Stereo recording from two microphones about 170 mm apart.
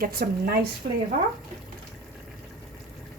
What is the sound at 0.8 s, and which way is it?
Speech, 50° right (ahead or behind).